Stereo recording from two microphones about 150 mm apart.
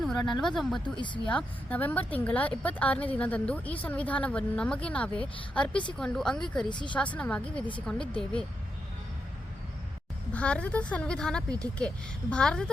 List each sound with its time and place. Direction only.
0.0 s speech: 5° left (ahead or behind)
0.9 s speech: 30° left (ahead or behind)
1.3 s a woman's voice: 10° left (ahead or behind)
6.7 s speech: 30° left (ahead or behind)
6.9 s speech: 10° left (ahead or behind)
10.3 s a woman's voice: 10° left (ahead or behind)